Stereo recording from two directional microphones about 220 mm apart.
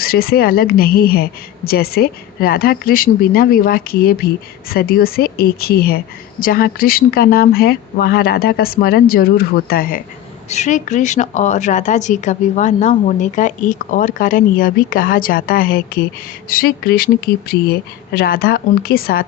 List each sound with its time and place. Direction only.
0.0 s a woman's voice: 45° left (ahead or behind)